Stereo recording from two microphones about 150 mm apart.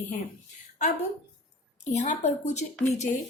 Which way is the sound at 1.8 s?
50° left (ahead or behind).